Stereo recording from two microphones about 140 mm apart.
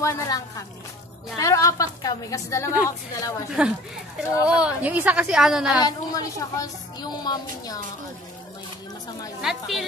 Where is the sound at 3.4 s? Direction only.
5° right (ahead or behind).